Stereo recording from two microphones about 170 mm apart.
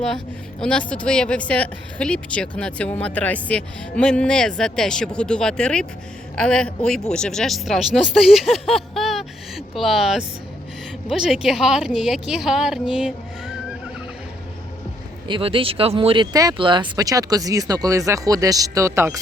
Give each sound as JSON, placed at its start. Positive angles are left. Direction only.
{"t": 0.6, "sound": "speech", "side_deg": 5}
{"t": 15.3, "sound": "speech", "side_deg": -30}